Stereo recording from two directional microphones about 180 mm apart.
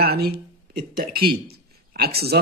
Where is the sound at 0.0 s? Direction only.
60° right (ahead or behind).